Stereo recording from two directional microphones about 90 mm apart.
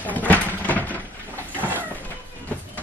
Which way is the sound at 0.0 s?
20° left (ahead or behind).